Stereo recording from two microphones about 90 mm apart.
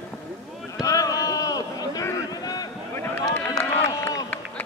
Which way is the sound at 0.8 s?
40° left (ahead or behind).